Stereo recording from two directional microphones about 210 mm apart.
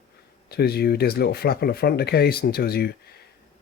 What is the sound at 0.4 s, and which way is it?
Speech, 50° left (ahead or behind).